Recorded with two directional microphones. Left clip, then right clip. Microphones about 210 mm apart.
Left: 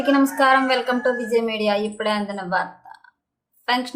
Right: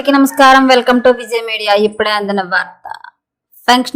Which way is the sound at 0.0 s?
45° right (ahead or behind).